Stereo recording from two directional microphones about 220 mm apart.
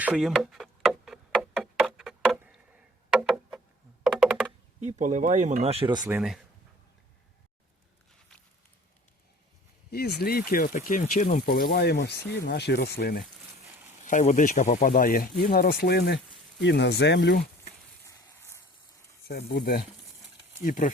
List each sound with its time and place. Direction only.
0.0 s a sound: 5° right (ahead or behind)
4.0 s computer keyboard: 5° right (ahead or behind)
4.8 s speech: 35° right (ahead or behind)
6.1 s speech: 5° right (ahead or behind)
9.9 s speech: 45° left (ahead or behind)
18.0 s a sound: 10° left (ahead or behind)
19.3 s speech: 45° left (ahead or behind)